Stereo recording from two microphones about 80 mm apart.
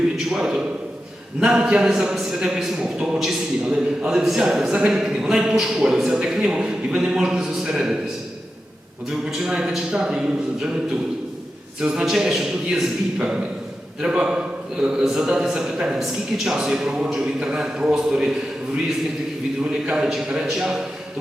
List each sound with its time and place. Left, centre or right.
0.3 s a man's voice: centre
9.0 s a man's voice: centre
11.8 s a man's voice: centre
19.8 s a man's voice: centre